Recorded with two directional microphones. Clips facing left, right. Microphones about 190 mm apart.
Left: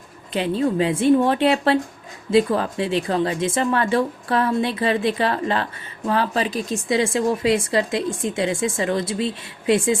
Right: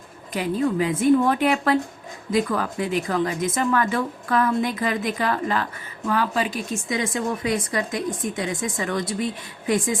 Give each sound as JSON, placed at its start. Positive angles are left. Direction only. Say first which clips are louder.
{"t": 0.3, "sound": "a woman's voice", "louder": "left 2 dB", "side_deg": 25}